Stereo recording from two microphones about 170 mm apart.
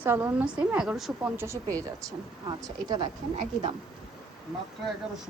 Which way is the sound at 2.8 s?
25° right (ahead or behind).